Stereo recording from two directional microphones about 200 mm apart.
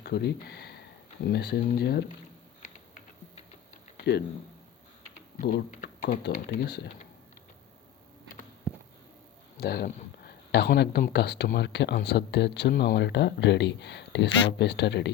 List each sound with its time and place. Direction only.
0.0 s speech: 55° left (ahead or behind)
6.0 s speech: 45° left (ahead or behind)
9.6 s speech: 50° left (ahead or behind)